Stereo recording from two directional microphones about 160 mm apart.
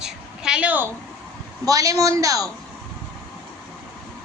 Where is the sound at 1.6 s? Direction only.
20° right (ahead or behind).